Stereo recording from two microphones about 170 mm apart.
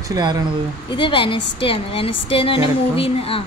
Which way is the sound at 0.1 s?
25° right (ahead or behind).